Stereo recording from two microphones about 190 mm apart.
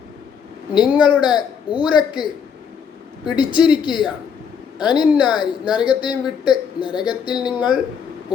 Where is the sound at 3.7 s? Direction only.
25° left (ahead or behind).